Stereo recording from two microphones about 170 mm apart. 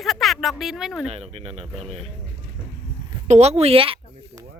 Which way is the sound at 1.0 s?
40° right (ahead or behind).